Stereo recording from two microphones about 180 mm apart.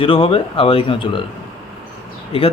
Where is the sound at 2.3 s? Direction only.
30° left (ahead or behind).